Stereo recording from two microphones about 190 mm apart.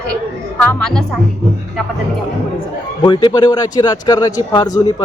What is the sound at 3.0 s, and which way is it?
A man's voice, 25° left (ahead or behind).